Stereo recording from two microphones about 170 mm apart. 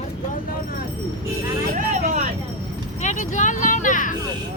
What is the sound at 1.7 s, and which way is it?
Vehicle, 45° right (ahead or behind).